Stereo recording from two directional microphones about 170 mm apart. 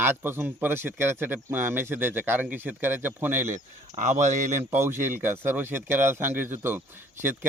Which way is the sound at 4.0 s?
45° right (ahead or behind).